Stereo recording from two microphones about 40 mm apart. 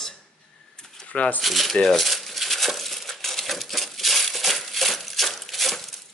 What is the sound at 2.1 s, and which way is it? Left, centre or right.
Crumpling, centre.